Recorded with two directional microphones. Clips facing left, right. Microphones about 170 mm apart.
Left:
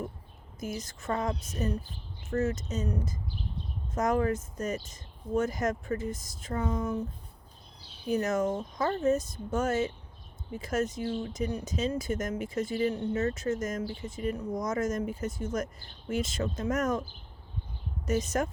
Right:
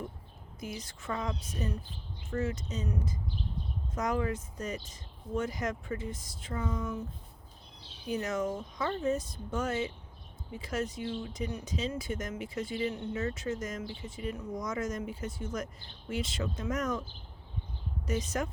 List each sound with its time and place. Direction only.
0.6 s speech: 45° left (ahead or behind)
8.1 s speech: 45° left (ahead or behind)
18.0 s speech: 45° left (ahead or behind)